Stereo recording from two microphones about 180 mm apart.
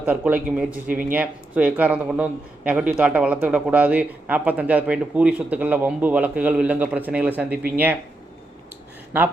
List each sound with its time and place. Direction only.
0.0 s a man's voice: 10° right (ahead or behind)
0.9 s speech: 50° right (ahead or behind)
1.1 s a man's voice: 10° right (ahead or behind)